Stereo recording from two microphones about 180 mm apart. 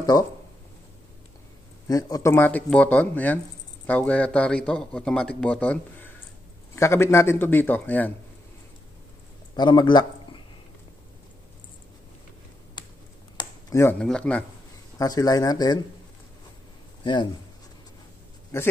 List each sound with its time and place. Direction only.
0.0 s speech: 20° left (ahead or behind)
1.9 s speech: 20° left (ahead or behind)
9.6 s a man's voice: 25° left (ahead or behind)
13.4 s speech: 20° left (ahead or behind)
15.0 s speech: 20° left (ahead or behind)
17.0 s speech: 25° left (ahead or behind)
18.5 s speech: 15° left (ahead or behind)